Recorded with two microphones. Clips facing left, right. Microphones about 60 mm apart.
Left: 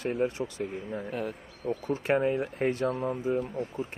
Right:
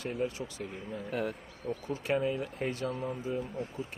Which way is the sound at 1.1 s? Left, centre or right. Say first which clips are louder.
Right 2 dB; centre.